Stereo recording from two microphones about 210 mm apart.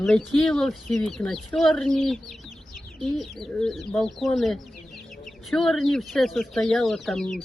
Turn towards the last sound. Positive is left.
turn(degrees=0)  # may be behind; listen again after turning